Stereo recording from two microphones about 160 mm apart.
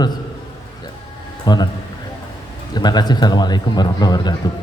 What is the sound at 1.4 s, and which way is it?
Speech, 25° left (ahead or behind).